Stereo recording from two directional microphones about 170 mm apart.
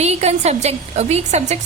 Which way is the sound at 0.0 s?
40° right (ahead or behind).